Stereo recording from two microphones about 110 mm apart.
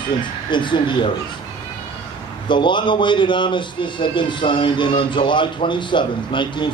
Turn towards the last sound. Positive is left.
turn(degrees=45)  # may be behind; listen again after turning